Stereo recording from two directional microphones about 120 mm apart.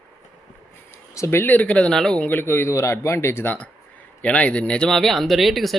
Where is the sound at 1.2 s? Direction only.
25° left (ahead or behind).